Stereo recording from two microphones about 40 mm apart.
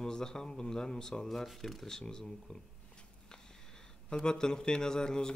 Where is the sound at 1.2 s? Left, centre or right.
Centre.